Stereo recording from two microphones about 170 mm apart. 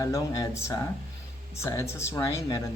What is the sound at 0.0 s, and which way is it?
A man's voice, 20° left (ahead or behind).